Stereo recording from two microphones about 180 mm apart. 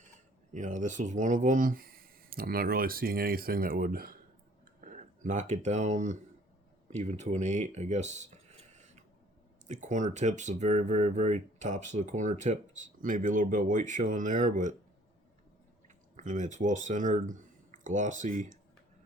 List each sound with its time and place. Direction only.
0.5 s speech: 45° right (ahead or behind)
16.1 s speech: 45° right (ahead or behind)